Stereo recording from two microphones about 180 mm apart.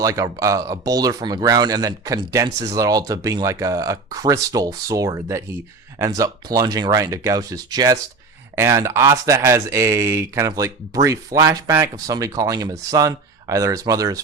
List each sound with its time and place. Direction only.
0.0 s speech: 15° right (ahead or behind)